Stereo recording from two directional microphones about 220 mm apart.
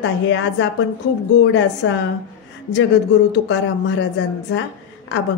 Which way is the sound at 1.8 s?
55° left (ahead or behind).